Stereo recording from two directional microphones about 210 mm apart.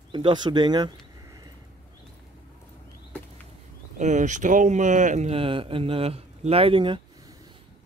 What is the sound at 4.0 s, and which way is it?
Speech, 35° right (ahead or behind).